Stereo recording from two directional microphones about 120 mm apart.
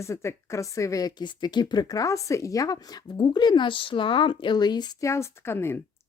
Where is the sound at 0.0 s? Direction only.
25° left (ahead or behind).